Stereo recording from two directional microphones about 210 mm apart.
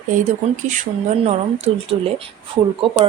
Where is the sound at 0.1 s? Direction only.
35° right (ahead or behind).